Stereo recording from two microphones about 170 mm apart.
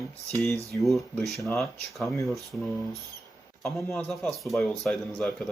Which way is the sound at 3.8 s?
5° left (ahead or behind).